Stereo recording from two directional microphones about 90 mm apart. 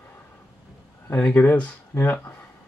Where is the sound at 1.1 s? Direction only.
20° left (ahead or behind).